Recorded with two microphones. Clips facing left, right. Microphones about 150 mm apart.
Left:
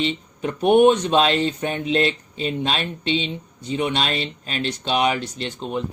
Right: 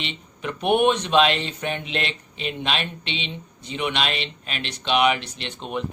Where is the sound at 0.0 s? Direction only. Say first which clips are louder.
Left 8 dB; 35° left (ahead or behind).